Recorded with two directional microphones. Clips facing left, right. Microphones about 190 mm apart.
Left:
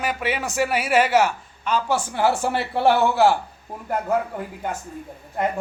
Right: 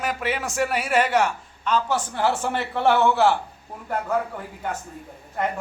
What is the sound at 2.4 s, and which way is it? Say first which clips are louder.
Speech: left 2 dB; 35° left (ahead or behind).